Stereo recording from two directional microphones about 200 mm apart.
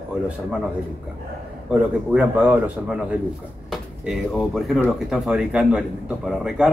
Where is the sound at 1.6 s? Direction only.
5° right (ahead or behind).